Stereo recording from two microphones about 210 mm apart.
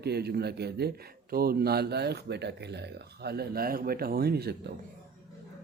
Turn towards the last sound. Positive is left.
turn(degrees=-50)  # may be behind; listen again after turning